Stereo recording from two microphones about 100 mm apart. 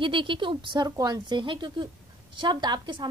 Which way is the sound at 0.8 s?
35° right (ahead or behind).